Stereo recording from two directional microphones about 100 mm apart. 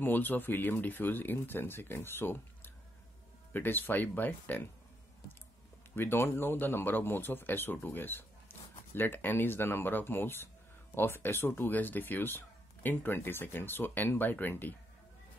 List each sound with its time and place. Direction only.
0.0 s speech: 20° left (ahead or behind)
5.9 s speech: 25° left (ahead or behind)
8.5 s a sound: 20° left (ahead or behind)
8.9 s speech: 20° left (ahead or behind)